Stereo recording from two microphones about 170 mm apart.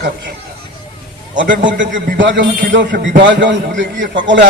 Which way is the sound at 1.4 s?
90° right.